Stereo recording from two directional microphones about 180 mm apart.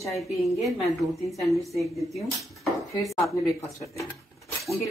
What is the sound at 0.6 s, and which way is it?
A woman's voice, centre (ahead or behind).